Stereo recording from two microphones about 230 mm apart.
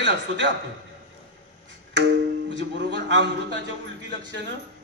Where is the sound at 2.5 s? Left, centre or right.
Right.